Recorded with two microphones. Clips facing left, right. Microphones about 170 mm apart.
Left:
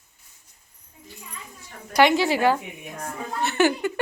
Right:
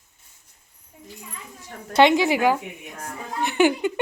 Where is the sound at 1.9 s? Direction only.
20° right (ahead or behind).